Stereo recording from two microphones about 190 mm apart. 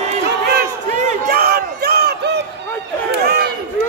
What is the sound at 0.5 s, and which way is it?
Crowd, 45° right (ahead or behind).